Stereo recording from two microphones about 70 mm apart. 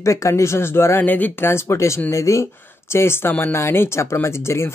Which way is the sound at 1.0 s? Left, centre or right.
Left.